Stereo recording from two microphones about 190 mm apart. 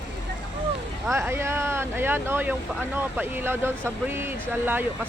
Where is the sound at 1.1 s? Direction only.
15° right (ahead or behind).